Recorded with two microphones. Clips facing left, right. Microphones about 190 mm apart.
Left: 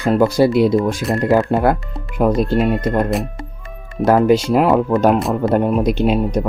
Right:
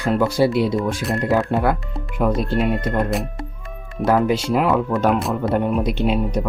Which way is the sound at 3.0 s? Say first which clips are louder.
Left 3 dB; centre (ahead or behind).